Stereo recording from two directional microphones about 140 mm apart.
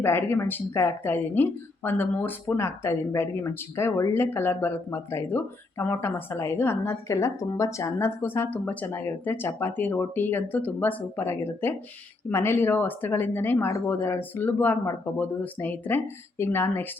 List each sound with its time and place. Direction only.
0.0 s speech: 15° left (ahead or behind)